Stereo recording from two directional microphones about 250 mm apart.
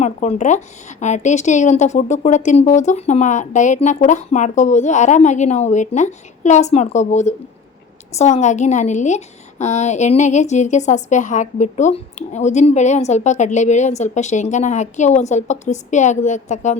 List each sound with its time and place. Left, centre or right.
0.0 s a woman's voice: left